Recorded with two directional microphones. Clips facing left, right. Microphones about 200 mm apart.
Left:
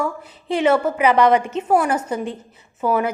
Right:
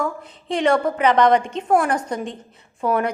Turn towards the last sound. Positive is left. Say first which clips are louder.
# left 1 dB
turn(degrees=5)  # may be behind; listen again after turning